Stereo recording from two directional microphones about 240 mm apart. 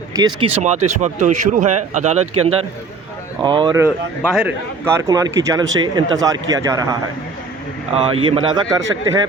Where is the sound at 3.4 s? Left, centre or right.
Centre.